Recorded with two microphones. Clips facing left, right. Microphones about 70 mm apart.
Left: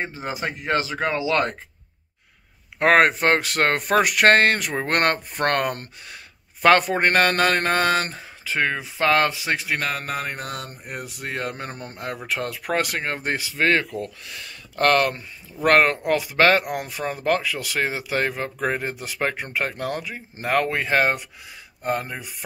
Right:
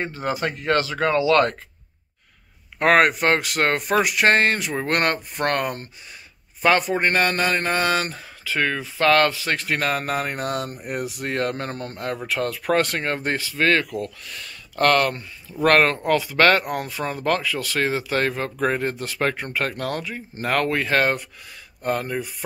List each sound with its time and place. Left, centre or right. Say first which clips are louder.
0.0 s speech: right 3 dB; centre
2.8 s speech: even; left
8.2 s speech: even; left
9.7 s speech: right 3 dB; centre